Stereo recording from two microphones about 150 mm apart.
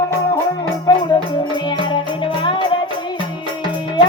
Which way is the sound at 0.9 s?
25° left (ahead or behind).